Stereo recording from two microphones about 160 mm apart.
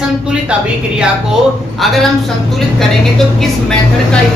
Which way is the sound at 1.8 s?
Centre (ahead or behind).